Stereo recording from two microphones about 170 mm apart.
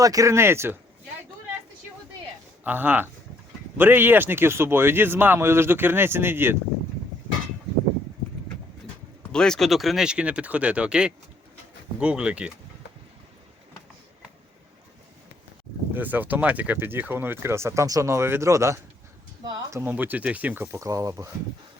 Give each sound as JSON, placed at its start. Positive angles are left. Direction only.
{"t": 0.0, "sound": "speech", "side_deg": -20}
{"t": 2.6, "sound": "speech", "side_deg": -10}
{"t": 9.3, "sound": "speech", "side_deg": 5}
{"t": 16.0, "sound": "speech", "side_deg": -10}